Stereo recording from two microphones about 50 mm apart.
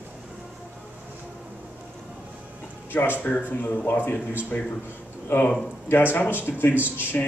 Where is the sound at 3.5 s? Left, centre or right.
Left.